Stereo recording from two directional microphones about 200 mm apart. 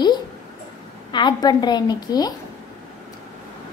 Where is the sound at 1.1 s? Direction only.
20° left (ahead or behind).